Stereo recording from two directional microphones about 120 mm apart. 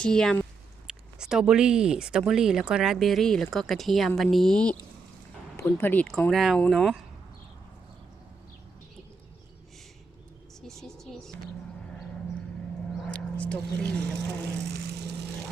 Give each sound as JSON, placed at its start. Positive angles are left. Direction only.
{"t": 0.0, "sound": "speech", "side_deg": 5}
{"t": 0.9, "sound": "speech", "side_deg": -5}
{"t": 5.5, "sound": "speech", "side_deg": 20}
{"t": 10.6, "sound": "a sound", "side_deg": 5}